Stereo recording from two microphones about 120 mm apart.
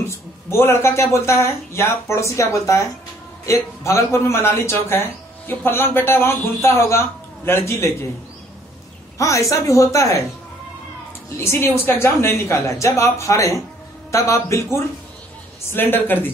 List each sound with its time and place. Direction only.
0.1 s speech: 20° left (ahead or behind)
9.2 s speech: 25° left (ahead or behind)
11.3 s speech: 20° left (ahead or behind)